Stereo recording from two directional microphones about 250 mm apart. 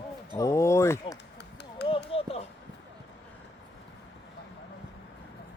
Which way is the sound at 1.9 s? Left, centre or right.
Left.